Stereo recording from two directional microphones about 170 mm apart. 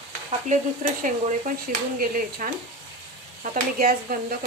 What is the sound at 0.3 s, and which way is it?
Speech, 45° right (ahead or behind).